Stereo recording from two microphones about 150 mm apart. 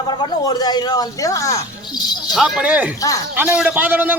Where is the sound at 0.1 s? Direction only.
30° left (ahead or behind).